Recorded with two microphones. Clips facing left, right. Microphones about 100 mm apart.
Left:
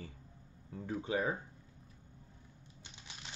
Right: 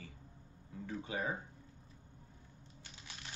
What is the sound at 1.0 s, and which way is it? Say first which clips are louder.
Speech: left 5 dB; 30° left (ahead or behind).